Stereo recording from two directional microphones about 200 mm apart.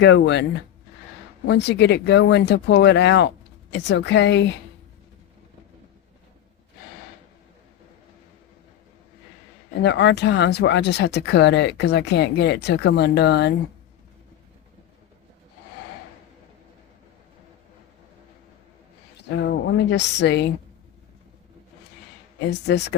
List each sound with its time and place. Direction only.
0.0 s speech: 60° left (ahead or behind)
1.5 s speech: 60° left (ahead or behind)
9.8 s speech: 60° left (ahead or behind)
19.4 s speech: 65° left (ahead or behind)
22.4 s speech: 60° left (ahead or behind)